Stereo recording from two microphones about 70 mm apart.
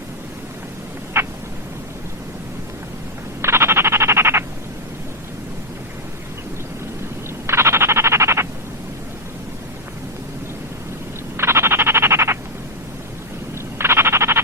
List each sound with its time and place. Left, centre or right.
1.2 s a sound: right
3.4 s frog: right
7.4 s frog: right
11.3 s frog: right
13.7 s frog: right